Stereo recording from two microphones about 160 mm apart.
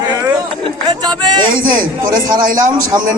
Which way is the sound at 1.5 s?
60° right (ahead or behind).